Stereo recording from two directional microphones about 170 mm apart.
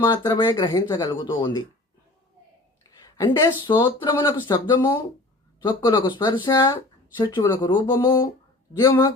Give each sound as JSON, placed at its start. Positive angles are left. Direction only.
{"t": 0.0, "sound": "speech", "side_deg": 25}
{"t": 3.0, "sound": "a sound", "side_deg": 20}
{"t": 3.7, "sound": "speech", "side_deg": 25}